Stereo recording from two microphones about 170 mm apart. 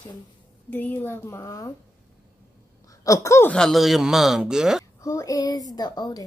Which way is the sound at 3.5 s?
Centre (ahead or behind).